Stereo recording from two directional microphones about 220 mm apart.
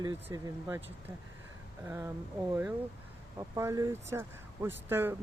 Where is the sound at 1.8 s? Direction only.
10° right (ahead or behind).